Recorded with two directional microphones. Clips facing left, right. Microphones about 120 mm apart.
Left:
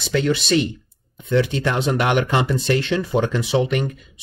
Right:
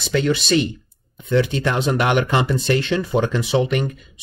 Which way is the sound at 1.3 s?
30° right (ahead or behind).